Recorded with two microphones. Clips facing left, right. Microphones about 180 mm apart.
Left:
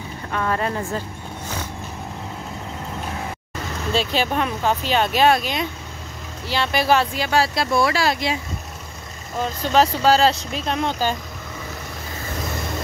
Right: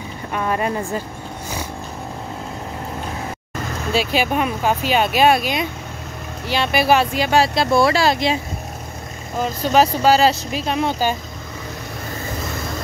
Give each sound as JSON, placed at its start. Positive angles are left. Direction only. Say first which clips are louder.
{"t": 0.3, "sound": "speech", "louder": "right 2 dB", "side_deg": -15}
{"t": 3.9, "sound": "speech", "louder": "right 2 dB", "side_deg": -10}
{"t": 9.4, "sound": "speech", "louder": "right 2 dB", "side_deg": -10}